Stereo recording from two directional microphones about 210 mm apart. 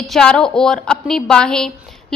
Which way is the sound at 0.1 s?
5° left (ahead or behind).